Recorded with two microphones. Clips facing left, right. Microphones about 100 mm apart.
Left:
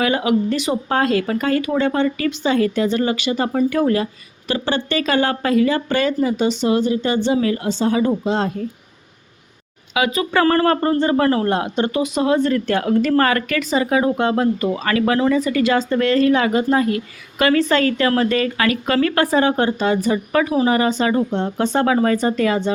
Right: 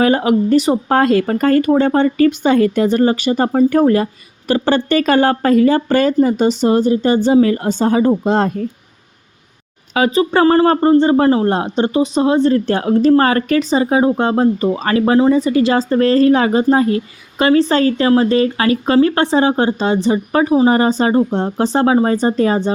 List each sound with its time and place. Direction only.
0.0 s speech: 40° right (ahead or behind)
8.2 s speech: 50° right (ahead or behind)
9.9 s speech: 35° right (ahead or behind)